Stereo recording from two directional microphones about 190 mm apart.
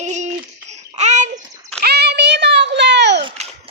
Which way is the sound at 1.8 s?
60° right (ahead or behind).